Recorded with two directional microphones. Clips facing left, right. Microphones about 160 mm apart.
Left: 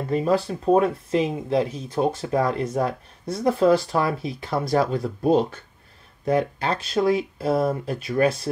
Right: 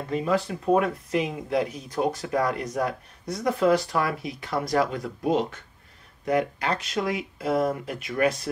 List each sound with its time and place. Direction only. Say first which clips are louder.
0.1 s speech: left 3 dB; 35° left (ahead or behind)